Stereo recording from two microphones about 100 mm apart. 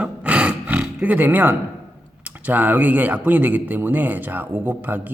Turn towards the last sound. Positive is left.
turn(degrees=-20)  # may be behind; listen again after turning